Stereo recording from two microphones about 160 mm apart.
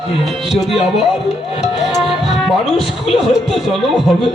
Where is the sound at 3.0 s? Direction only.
Centre (ahead or behind).